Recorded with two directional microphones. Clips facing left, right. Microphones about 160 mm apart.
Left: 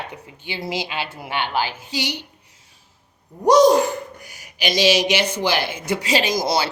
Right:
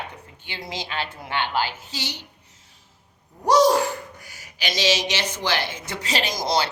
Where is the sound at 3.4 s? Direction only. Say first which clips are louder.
Left 4 dB; 15° left (ahead or behind).